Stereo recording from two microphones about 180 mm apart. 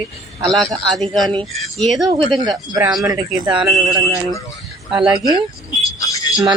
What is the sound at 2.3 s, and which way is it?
Speech, 25° right (ahead or behind).